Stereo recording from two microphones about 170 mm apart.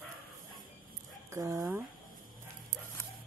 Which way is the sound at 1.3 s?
20° right (ahead or behind).